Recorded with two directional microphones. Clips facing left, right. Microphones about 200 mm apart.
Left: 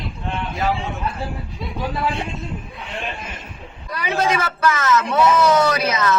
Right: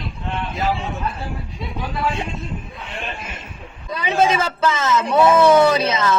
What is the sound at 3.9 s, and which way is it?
A man's voice, 25° right (ahead or behind).